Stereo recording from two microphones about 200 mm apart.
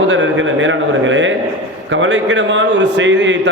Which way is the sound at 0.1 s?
65° right (ahead or behind).